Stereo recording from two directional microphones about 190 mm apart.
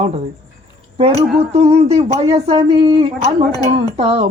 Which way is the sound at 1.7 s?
35° right (ahead or behind).